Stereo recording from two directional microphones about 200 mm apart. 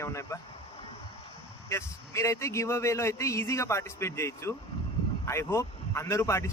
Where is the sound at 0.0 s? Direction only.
15° left (ahead or behind).